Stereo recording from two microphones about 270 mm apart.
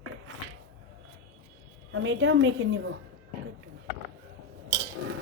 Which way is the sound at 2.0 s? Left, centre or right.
Right.